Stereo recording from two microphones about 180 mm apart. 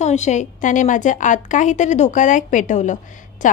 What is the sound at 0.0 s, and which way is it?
A woman's voice, 40° left (ahead or behind).